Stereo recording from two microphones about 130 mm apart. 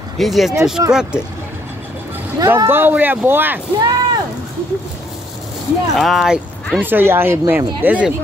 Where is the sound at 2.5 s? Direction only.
15° right (ahead or behind).